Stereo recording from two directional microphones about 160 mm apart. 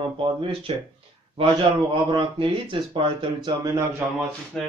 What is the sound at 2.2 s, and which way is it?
Speech, 30° right (ahead or behind).